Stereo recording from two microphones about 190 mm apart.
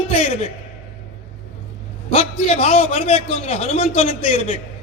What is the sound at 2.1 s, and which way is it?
A man's voice, 30° left (ahead or behind).